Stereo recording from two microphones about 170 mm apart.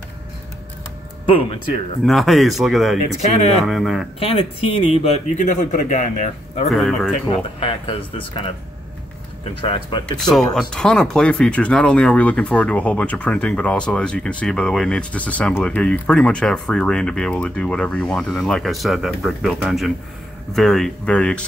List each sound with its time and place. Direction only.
2.0 s speech: centre (ahead or behind)
3.0 s speech: 40° left (ahead or behind)
3.6 s speech: centre (ahead or behind)
4.2 s speech: 35° left (ahead or behind)
6.7 s speech: centre (ahead or behind)
7.2 s speech: 30° left (ahead or behind)
9.6 s speech: 30° left (ahead or behind)
10.3 s speech: 5° left (ahead or behind)